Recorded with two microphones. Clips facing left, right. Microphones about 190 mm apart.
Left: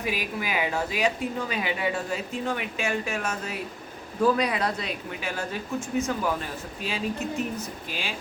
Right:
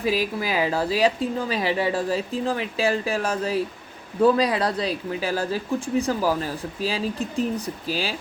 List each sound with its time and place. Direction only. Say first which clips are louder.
0.0 s speech: right 6 dB; 35° right (ahead or behind)